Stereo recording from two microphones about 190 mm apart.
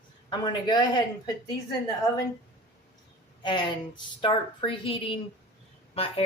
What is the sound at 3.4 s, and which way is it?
Speech, 25° left (ahead or behind).